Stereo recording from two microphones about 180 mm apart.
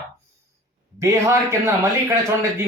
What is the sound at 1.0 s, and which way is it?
Speech, 15° right (ahead or behind).